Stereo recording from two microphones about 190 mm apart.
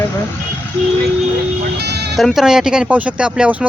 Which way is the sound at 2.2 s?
Centre (ahead or behind).